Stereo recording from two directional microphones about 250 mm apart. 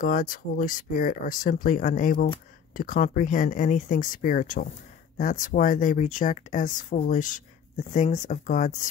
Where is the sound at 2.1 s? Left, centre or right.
Centre.